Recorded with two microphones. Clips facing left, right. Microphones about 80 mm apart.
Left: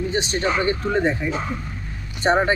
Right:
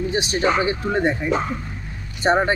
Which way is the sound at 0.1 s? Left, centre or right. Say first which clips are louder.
Right 4 dB; centre.